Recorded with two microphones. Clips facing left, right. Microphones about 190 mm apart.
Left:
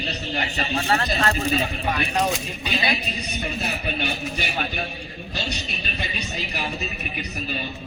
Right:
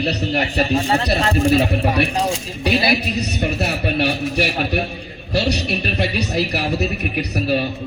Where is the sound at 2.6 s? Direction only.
75° right (ahead or behind).